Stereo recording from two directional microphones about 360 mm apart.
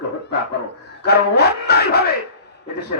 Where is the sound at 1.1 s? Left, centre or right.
Left.